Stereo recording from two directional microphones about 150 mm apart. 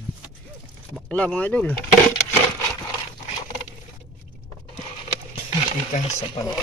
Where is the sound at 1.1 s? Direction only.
10° left (ahead or behind).